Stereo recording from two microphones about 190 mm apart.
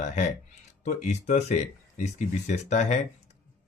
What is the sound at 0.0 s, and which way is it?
Speech, 40° left (ahead or behind).